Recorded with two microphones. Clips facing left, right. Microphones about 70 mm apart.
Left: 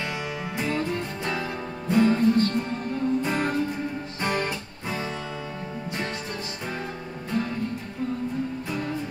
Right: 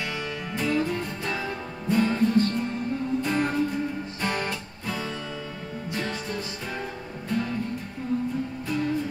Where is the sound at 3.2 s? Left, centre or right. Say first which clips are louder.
Even; centre.